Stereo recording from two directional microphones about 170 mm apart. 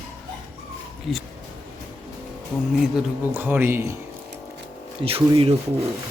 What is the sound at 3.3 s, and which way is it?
Speech, 10° right (ahead or behind).